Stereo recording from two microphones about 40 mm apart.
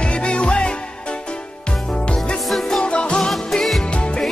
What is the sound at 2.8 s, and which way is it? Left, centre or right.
Music, left.